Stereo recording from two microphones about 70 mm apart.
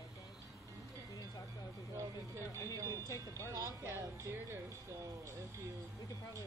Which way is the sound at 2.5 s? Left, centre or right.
Left.